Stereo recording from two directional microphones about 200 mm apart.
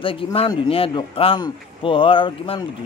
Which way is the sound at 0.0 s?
25° left (ahead or behind).